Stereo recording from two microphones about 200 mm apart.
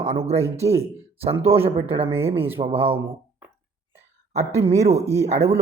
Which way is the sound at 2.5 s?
30° right (ahead or behind).